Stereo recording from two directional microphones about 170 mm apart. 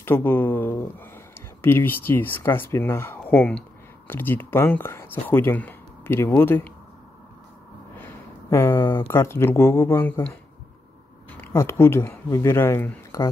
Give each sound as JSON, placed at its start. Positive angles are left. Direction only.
{"t": 0.0, "sound": "speech", "side_deg": 15}
{"t": 8.0, "sound": "a sound", "side_deg": 15}
{"t": 9.1, "sound": "speech", "side_deg": 15}
{"t": 11.3, "sound": "speech", "side_deg": 15}